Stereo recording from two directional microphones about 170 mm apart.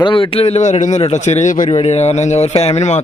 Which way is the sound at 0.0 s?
30° left (ahead or behind).